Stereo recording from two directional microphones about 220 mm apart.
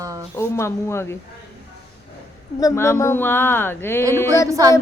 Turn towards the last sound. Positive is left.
turn(degrees=-15)  # may be behind; listen again after turning